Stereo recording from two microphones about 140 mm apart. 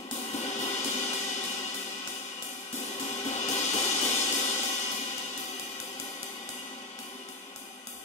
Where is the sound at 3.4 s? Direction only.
55° left (ahead or behind).